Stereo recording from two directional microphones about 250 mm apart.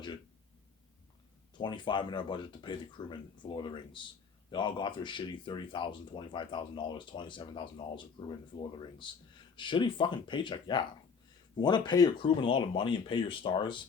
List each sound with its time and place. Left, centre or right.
1.5 s speech: centre